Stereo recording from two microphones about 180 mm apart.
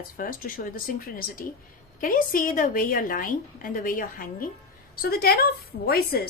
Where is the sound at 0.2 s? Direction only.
50° left (ahead or behind).